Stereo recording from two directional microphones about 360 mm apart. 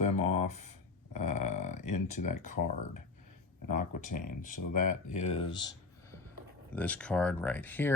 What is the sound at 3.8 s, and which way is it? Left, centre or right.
Speech, left.